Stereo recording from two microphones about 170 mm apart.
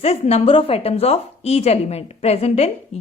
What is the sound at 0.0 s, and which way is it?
A woman's voice, 35° left (ahead or behind).